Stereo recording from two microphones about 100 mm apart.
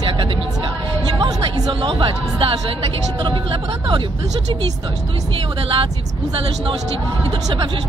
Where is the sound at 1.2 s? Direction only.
50° right (ahead or behind).